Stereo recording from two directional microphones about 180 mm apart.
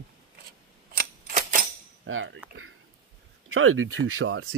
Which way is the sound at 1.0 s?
50° right (ahead or behind).